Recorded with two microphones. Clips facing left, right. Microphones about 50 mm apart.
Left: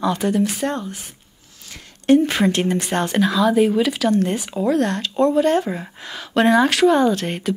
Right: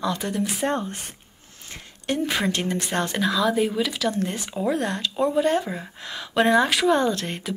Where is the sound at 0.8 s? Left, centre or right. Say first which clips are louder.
Left 1 dB; right.